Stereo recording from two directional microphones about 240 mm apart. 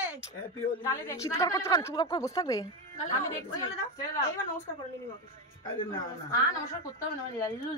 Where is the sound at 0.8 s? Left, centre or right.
Centre.